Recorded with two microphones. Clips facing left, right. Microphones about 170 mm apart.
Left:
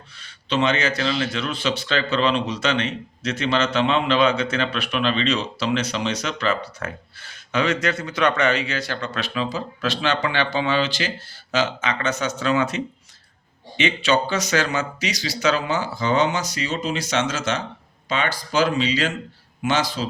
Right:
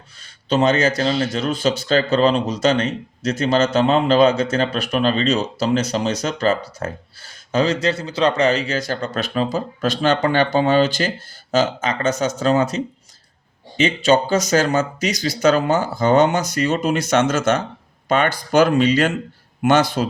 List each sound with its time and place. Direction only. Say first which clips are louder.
0.2 s a man's voice: right 4 dB; 40° right (ahead or behind)